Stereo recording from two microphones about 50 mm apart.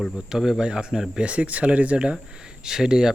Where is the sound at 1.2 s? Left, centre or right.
Right.